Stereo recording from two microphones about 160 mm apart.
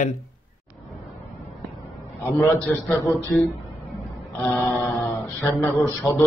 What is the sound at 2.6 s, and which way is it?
Mantra, 5° left (ahead or behind).